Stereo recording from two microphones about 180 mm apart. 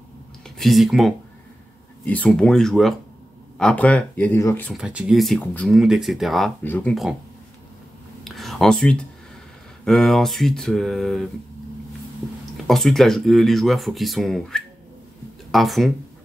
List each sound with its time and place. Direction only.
0.6 s speech: centre (ahead or behind)
4.7 s speech: 5° right (ahead or behind)
8.2 s a sound: centre (ahead or behind)
9.8 s speech: centre (ahead or behind)
12.6 s speech: centre (ahead or behind)